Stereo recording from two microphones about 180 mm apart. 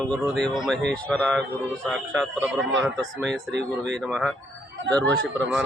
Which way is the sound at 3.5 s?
75° right (ahead or behind).